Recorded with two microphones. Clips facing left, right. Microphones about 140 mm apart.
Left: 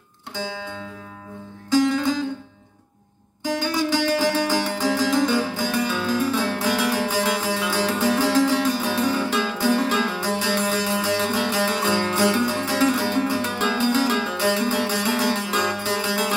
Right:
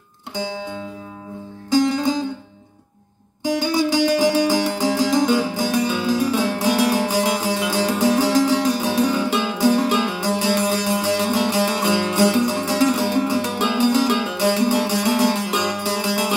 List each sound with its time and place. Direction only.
0.3 s music: 15° right (ahead or behind)
3.4 s music: 15° right (ahead or behind)